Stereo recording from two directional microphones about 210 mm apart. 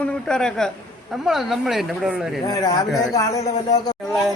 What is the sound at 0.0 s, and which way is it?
A man's voice, 5° left (ahead or behind).